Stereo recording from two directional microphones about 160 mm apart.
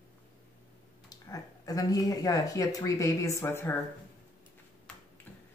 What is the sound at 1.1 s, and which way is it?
Speech, 25° left (ahead or behind).